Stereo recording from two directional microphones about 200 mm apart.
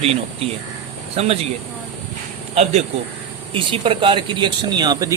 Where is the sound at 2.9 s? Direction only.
30° right (ahead or behind).